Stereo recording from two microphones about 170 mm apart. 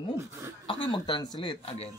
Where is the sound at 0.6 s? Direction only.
30° left (ahead or behind).